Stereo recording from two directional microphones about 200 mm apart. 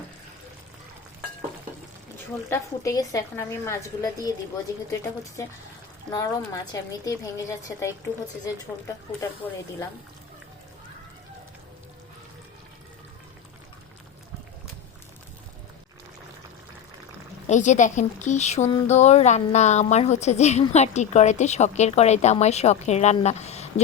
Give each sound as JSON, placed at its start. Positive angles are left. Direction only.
{"t": 2.5, "sound": "a woman's voice", "side_deg": 15}
{"t": 6.1, "sound": "a woman's voice", "side_deg": 15}
{"t": 17.4, "sound": "a woman's voice", "side_deg": 35}